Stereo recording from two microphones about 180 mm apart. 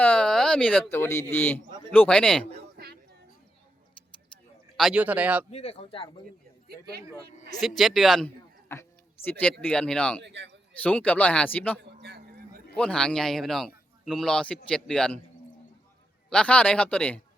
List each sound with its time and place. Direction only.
0.0 s a man's voice: 5° left (ahead or behind)
2.7 s a sound: 65° right (ahead or behind)
4.8 s a man's voice: 5° right (ahead or behind)
5.5 s speech: 35° left (ahead or behind)
7.6 s a man's voice: centre (ahead or behind)
8.7 s a sound: 15° left (ahead or behind)
9.4 s speech: 10° left (ahead or behind)
10.2 s a man's voice: 75° right (ahead or behind)
10.8 s speech: 5° left (ahead or behind)
12.0 s a sound: 60° right (ahead or behind)
12.7 s a man's voice: 5° left (ahead or behind)
16.3 s speech: 5° left (ahead or behind)